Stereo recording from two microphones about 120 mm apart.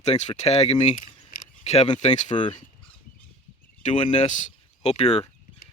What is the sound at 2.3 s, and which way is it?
Speech, 45° left (ahead or behind).